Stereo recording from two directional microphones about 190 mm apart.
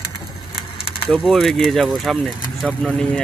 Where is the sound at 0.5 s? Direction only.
30° left (ahead or behind).